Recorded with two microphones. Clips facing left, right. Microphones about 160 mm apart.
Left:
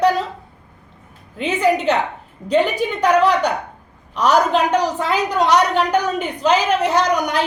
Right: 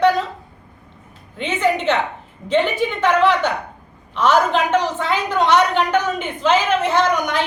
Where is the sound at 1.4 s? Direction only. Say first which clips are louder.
Left 2 dB; 40° left (ahead or behind).